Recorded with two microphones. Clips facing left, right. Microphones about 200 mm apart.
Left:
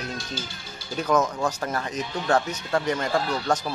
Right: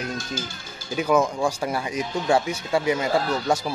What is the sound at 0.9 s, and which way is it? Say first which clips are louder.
Speech: right 2 dB; 10° right (ahead or behind).